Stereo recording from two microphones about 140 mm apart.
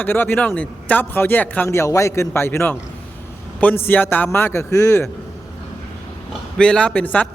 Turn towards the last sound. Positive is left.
turn(degrees=10)  # may be behind; listen again after turning